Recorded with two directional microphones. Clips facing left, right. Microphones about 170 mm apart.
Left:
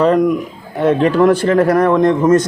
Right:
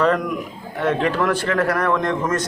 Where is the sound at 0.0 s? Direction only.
25° left (ahead or behind).